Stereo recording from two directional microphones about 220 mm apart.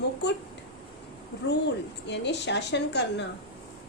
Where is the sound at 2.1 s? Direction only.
50° left (ahead or behind).